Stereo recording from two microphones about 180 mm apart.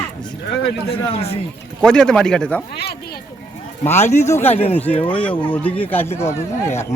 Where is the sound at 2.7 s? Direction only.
60° left (ahead or behind).